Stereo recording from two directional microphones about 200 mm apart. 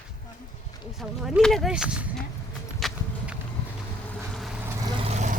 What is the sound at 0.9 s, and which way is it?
A woman's voice, centre (ahead or behind).